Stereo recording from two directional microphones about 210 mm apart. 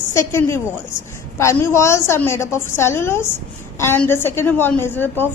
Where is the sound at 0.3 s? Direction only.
10° left (ahead or behind).